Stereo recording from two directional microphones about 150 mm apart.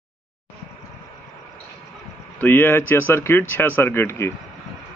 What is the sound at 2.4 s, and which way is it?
Speech, 15° left (ahead or behind).